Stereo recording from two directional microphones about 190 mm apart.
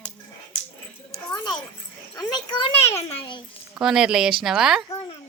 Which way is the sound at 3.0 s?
25° left (ahead or behind).